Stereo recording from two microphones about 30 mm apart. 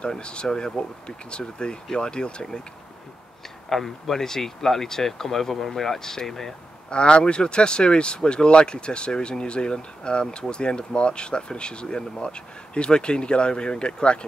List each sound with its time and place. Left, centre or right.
0.2 s speech: left
0.5 s speech: left
1.0 s speech: left
3.6 s speech: centre
6.9 s speech: left